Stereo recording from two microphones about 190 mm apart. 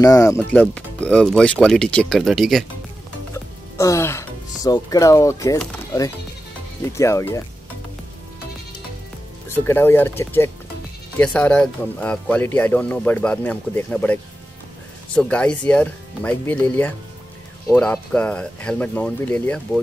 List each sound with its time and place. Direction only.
0.0 s speech: 15° left (ahead or behind); by 2.6 s centre (ahead or behind)
3.7 s speech: 15° left (ahead or behind)
6.9 s speech: 15° left (ahead or behind)
9.5 s speech: 10° left (ahead or behind)